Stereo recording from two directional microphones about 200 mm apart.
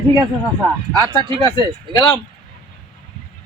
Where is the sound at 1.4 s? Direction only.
20° left (ahead or behind).